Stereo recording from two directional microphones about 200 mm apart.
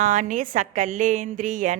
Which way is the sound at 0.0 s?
40° right (ahead or behind).